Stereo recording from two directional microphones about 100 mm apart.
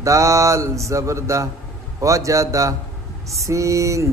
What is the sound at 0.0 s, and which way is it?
A man's voice, 30° right (ahead or behind).